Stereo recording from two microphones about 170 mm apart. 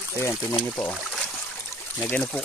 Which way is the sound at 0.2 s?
15° left (ahead or behind).